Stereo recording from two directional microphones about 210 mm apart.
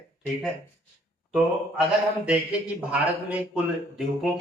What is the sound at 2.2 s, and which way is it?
Speech, 5° right (ahead or behind).